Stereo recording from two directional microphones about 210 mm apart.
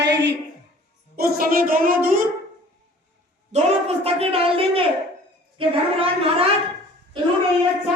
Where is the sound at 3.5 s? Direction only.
35° right (ahead or behind).